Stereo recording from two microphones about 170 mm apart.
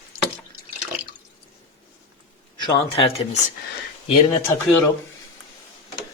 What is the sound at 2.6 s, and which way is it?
Speech, 30° left (ahead or behind).